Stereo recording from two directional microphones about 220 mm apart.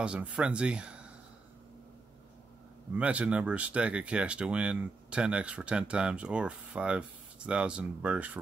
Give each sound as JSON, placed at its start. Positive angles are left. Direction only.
{"t": 0.0, "sound": "speech", "side_deg": -5}
{"t": 2.9, "sound": "speech", "side_deg": -5}